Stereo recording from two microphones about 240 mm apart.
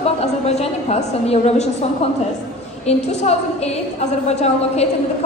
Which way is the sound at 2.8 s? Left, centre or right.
Left.